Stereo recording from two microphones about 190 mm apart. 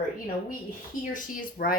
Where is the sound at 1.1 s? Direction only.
45° left (ahead or behind).